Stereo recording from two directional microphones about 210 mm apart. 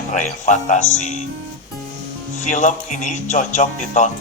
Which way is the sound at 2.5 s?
35° left (ahead or behind).